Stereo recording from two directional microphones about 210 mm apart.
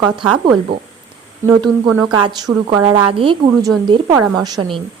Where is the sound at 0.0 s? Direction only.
20° right (ahead or behind).